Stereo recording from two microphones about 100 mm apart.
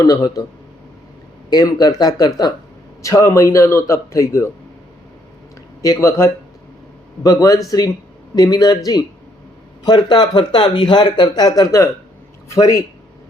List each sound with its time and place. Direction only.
0.0 s a man's voice: 35° left (ahead or behind)
1.5 s a man's voice: 40° left (ahead or behind)
5.8 s a man's voice: 35° left (ahead or behind)